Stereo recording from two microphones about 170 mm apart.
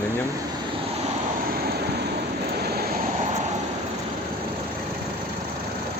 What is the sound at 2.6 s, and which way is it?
Vehicle, 65° right (ahead or behind).